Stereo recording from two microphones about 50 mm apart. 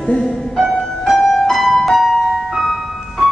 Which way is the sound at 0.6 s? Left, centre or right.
Centre.